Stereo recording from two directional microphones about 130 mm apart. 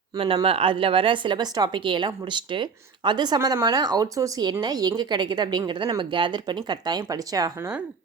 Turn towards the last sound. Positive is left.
turn(degrees=-20)  # may be behind; listen again after turning